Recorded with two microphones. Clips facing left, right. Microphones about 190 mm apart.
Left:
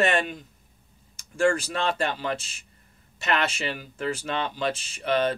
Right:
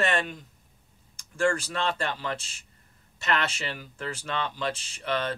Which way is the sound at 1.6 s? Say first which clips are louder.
Left 3 dB; 10° left (ahead or behind).